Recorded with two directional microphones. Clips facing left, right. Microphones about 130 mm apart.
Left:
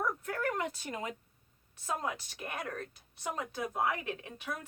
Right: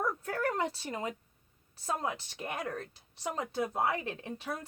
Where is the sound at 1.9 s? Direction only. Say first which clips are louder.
Right 2 dB; 30° right (ahead or behind).